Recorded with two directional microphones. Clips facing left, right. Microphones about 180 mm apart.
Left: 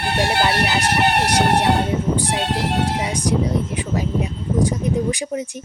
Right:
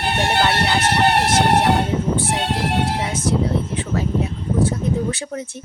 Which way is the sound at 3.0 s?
15° left (ahead or behind).